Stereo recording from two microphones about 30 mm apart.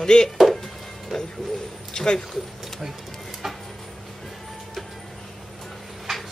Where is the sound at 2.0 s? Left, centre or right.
Left.